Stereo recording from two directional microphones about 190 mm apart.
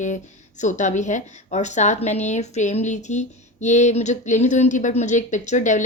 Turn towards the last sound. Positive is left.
turn(degrees=40)  # may be behind; listen again after turning